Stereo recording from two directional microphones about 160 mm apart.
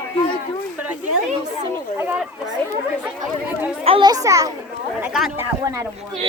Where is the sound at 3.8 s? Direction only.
30° right (ahead or behind).